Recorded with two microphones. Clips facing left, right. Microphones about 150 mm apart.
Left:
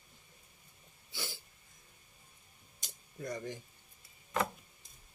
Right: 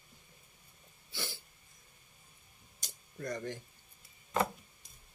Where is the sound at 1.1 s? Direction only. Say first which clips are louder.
Right 1 dB; 20° left (ahead or behind).